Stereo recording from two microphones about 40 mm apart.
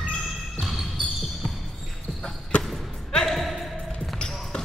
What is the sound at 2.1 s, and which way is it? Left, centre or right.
Basketball bounce, centre.